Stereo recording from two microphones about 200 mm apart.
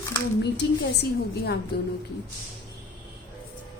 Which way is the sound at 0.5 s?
55° left (ahead or behind).